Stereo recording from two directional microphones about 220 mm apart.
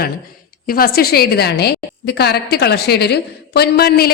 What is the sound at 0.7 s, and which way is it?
A woman's voice, 45° left (ahead or behind).